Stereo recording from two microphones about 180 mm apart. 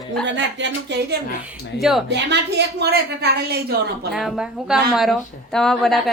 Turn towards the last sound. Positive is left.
turn(degrees=0)  # may be behind; listen again after turning